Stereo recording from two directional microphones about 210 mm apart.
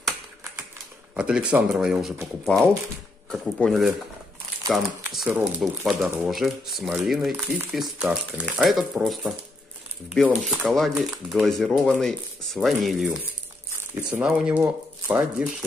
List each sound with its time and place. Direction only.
1.1 s speech: 5° right (ahead or behind)